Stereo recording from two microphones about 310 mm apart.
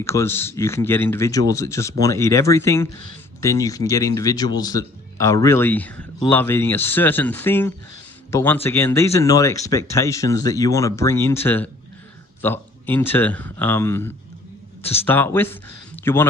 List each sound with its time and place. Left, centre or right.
0.0 s speech: centre